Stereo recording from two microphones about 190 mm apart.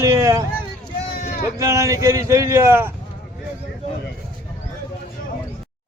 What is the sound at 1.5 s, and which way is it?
A man's voice, 15° right (ahead or behind).